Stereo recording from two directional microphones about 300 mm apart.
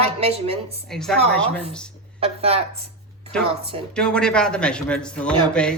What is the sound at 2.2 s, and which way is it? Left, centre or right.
Speech, centre.